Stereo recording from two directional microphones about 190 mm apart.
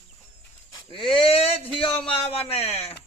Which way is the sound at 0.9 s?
25° left (ahead or behind).